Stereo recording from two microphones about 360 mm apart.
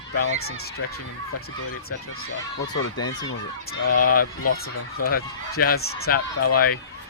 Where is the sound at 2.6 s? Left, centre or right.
Left.